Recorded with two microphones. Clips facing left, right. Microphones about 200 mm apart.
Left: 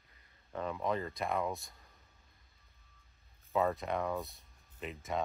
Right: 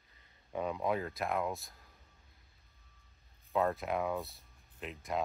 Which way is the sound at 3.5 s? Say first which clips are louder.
Even; centre (ahead or behind).